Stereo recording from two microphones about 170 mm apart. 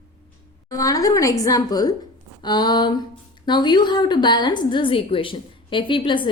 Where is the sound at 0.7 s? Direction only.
20° left (ahead or behind).